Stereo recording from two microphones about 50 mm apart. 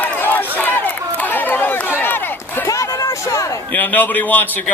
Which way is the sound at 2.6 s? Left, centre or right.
Left.